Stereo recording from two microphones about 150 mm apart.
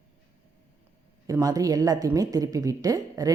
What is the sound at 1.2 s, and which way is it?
Speech, 25° right (ahead or behind).